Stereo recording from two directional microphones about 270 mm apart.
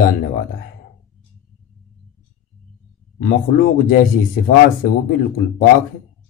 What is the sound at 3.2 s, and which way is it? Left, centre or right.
Speech, left.